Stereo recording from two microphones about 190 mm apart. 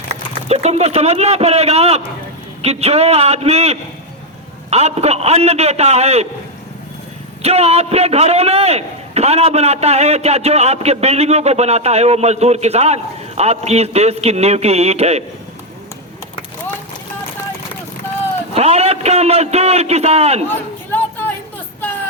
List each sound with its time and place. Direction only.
0.1 s a man's voice: 35° right (ahead or behind)
7.4 s a man's voice: 35° right (ahead or behind)
18.5 s a man's voice: 35° right (ahead or behind)
20.5 s a sound: 10° left (ahead or behind)